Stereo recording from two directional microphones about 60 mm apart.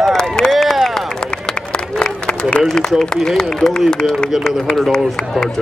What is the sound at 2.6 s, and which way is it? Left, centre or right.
A man's voice, centre.